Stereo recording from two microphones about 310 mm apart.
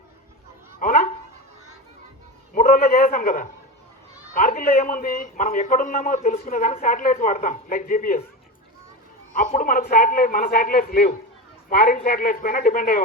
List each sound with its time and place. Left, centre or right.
0.8 s a sound: left
2.6 s a man's voice: left
9.3 s a man's voice: left